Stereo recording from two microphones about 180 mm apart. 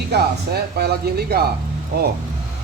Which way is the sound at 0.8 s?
60° right (ahead or behind).